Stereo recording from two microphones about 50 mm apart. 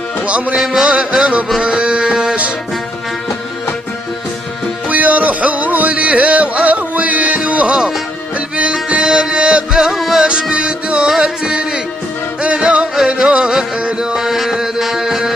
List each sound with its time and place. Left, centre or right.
0.6 s music: centre
4.8 s music: right
8.8 s music: centre
9.8 s music: centre
10.2 s music: right
11.1 s music: centre
12.9 s music: centre
13.3 s a sound: centre